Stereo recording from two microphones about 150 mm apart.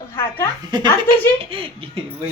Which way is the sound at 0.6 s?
30° right (ahead or behind).